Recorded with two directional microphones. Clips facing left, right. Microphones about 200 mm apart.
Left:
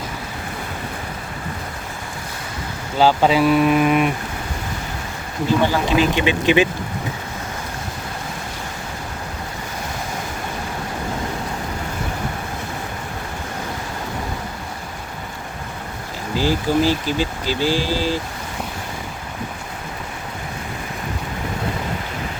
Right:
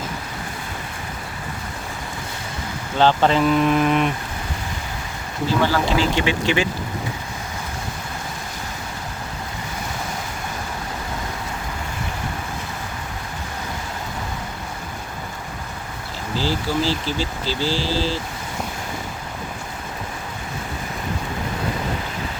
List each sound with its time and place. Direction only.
3.0 s speech: 10° left (ahead or behind)
5.6 s speech: 15° left (ahead or behind)
16.3 s speech: 15° left (ahead or behind)